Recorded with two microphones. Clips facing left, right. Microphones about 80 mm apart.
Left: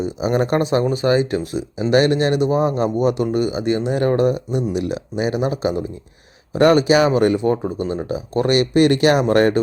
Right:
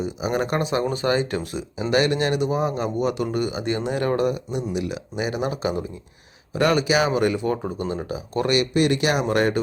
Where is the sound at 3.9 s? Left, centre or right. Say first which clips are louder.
Left 5 dB; left.